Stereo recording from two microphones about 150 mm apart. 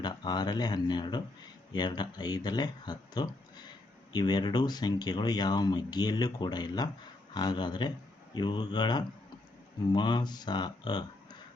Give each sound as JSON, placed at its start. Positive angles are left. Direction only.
{"t": 0.0, "sound": "speech", "side_deg": 30}